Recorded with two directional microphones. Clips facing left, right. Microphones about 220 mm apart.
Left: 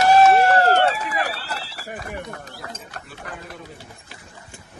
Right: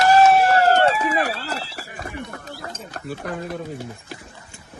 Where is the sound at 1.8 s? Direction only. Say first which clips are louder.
Left 1 dB; 45° left (ahead or behind).